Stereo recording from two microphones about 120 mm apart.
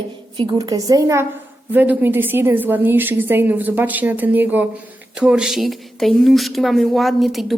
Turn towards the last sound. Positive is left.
turn(degrees=0)  # may be behind; listen again after turning